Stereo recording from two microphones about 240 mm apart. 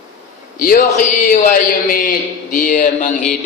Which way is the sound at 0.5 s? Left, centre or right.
Left.